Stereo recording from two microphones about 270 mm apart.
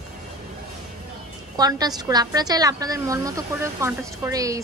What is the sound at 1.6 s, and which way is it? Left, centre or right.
Speech, centre.